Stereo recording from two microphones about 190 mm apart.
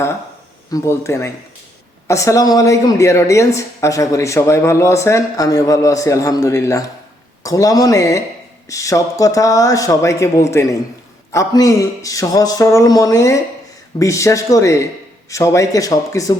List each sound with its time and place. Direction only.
0.7 s a woman's voice: 15° left (ahead or behind)